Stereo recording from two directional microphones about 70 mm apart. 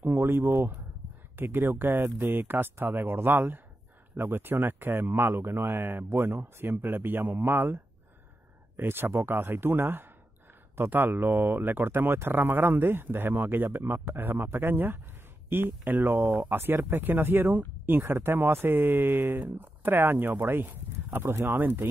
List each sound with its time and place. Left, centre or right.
0.0 s speech: right